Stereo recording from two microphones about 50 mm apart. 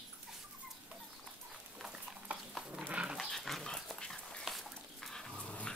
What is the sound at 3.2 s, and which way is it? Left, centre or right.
Dog, centre.